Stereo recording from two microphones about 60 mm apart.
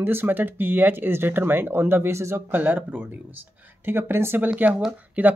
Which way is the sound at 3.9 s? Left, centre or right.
Right.